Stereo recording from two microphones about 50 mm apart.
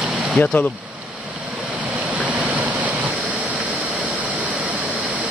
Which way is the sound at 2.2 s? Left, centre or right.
Right.